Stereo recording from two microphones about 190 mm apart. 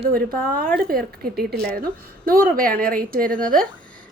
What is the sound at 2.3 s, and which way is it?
Speech, 50° right (ahead or behind).